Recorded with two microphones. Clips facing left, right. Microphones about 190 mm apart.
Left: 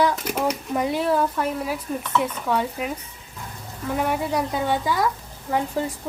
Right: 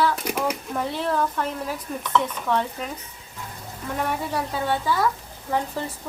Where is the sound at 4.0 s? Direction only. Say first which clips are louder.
Left 3 dB; 10° left (ahead or behind).